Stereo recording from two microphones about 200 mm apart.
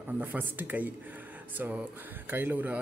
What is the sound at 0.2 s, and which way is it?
A man's voice, 10° right (ahead or behind).